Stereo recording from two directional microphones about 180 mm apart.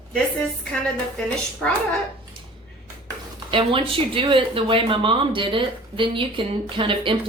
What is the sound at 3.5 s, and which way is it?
Speech, 30° right (ahead or behind).